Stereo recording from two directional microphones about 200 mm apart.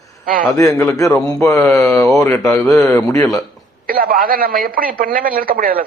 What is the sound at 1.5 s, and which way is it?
Mantra, 5° left (ahead or behind).